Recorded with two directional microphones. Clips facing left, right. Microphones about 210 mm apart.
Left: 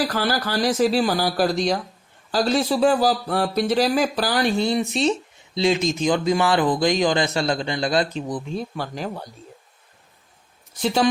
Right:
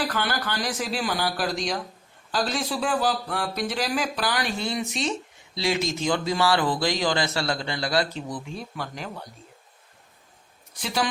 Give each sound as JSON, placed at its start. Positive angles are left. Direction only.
{"t": 0.0, "sound": "speech", "side_deg": 35}
{"t": 8.5, "sound": "speech", "side_deg": 35}